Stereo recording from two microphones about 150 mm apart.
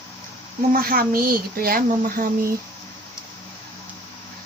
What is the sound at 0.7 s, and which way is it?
Speech, 75° right (ahead or behind).